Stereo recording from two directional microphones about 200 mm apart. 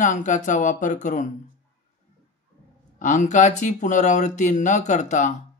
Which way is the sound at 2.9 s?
40° left (ahead or behind).